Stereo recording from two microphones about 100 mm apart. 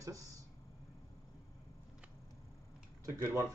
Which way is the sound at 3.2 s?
25° right (ahead or behind).